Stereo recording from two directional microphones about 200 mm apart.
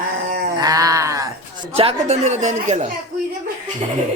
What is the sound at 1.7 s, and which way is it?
Speech, 30° right (ahead or behind).